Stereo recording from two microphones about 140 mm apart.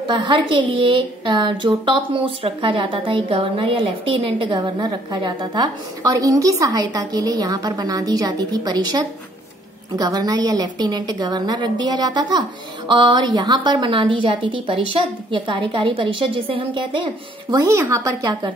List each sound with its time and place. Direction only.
0.1 s a woman's voice: 30° right (ahead or behind)